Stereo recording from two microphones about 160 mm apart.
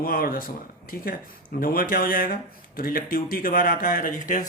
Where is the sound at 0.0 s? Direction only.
65° left (ahead or behind).